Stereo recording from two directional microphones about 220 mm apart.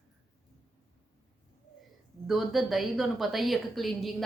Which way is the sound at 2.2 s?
Centre (ahead or behind).